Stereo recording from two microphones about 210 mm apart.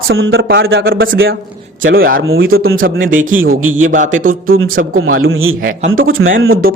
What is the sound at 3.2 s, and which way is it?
Speech, 70° right (ahead or behind).